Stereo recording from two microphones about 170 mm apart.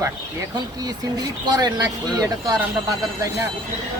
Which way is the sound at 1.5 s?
25° right (ahead or behind).